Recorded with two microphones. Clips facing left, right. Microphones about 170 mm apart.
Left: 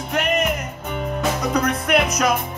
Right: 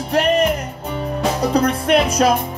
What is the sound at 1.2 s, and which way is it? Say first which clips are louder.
Music: right 5 dB; 30° right (ahead or behind).